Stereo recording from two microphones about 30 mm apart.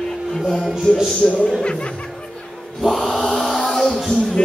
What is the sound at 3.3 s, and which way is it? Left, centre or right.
Chant, centre.